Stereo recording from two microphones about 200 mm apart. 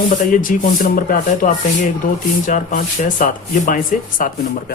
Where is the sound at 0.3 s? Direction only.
45° left (ahead or behind).